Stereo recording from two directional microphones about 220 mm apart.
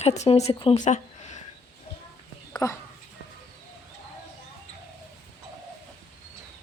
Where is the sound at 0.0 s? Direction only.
30° left (ahead or behind).